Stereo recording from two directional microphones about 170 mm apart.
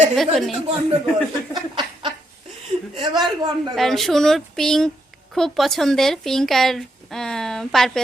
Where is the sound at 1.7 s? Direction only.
25° right (ahead or behind).